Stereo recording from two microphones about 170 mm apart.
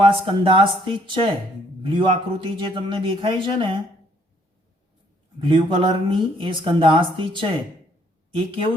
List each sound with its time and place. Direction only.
0.0 s speech: 30° right (ahead or behind)
5.5 s speech: 30° right (ahead or behind)